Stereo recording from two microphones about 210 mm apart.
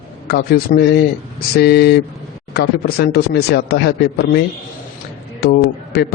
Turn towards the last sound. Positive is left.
turn(degrees=50)  # may be behind; listen again after turning